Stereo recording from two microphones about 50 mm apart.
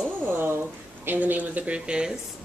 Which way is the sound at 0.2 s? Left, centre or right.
Right.